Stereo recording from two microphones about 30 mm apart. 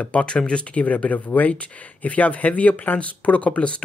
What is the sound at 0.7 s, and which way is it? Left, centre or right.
Speech, left.